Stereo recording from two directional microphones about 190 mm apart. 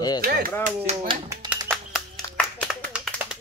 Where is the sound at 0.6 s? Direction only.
45° right (ahead or behind).